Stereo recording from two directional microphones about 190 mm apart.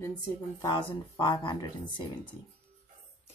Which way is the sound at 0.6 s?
25° left (ahead or behind).